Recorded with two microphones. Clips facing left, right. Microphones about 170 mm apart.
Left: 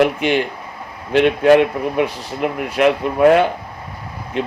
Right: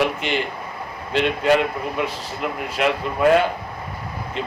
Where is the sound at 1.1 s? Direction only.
60° left (ahead or behind).